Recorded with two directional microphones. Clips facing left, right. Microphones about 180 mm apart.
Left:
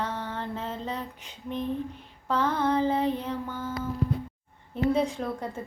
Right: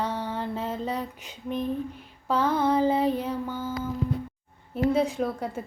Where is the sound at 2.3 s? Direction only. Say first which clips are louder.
Right 2 dB; 10° right (ahead or behind).